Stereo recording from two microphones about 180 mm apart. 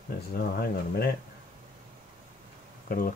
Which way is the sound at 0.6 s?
60° left (ahead or behind).